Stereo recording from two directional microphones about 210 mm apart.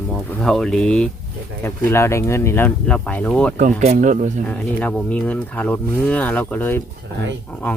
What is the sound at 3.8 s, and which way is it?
Speech, 35° right (ahead or behind).